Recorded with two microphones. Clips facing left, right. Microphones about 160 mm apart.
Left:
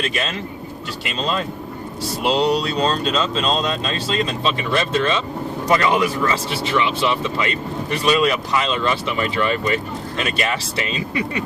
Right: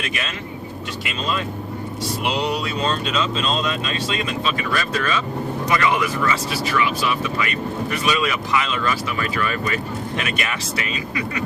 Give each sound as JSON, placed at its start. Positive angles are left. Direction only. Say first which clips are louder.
{"t": 2.2, "sound": "speech", "louder": "left 6 dB", "side_deg": 35}